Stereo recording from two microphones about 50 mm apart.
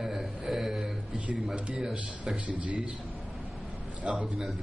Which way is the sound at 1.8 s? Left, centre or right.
Centre.